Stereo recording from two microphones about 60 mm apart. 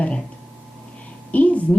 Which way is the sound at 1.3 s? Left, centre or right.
Left.